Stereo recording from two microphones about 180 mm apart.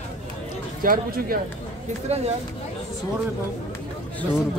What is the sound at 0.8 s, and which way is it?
Speech, 50° right (ahead or behind).